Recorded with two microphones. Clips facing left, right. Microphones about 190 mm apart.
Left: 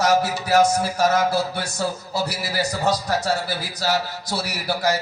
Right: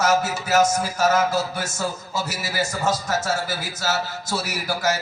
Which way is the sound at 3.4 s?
35° left (ahead or behind).